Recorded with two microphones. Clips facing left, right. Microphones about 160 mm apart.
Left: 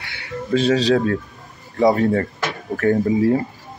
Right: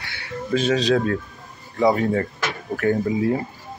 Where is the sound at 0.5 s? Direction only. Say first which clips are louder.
Left 3 dB; 40° left (ahead or behind).